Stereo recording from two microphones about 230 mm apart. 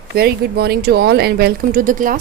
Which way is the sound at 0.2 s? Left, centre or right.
Right.